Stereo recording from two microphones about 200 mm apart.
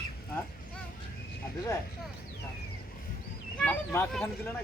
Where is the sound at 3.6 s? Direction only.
10° left (ahead or behind).